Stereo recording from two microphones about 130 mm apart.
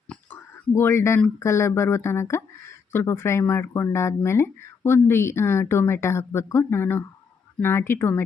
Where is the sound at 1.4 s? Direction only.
20° left (ahead or behind).